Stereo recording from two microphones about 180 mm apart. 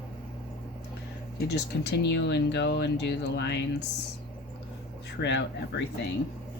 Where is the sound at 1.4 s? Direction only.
70° left (ahead or behind).